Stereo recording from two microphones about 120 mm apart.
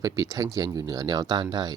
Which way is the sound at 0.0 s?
30° right (ahead or behind).